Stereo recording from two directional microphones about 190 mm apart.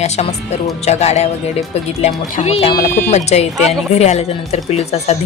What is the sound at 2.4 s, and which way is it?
A woman's voice, 30° left (ahead or behind).